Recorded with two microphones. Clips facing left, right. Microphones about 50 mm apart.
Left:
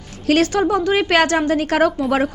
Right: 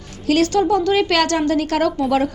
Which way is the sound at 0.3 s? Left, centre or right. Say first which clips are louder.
Left 1 dB; left.